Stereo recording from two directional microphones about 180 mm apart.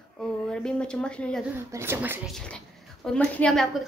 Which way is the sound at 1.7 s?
15° right (ahead or behind).